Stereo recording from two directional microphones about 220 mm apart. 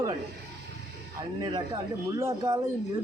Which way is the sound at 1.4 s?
20° right (ahead or behind).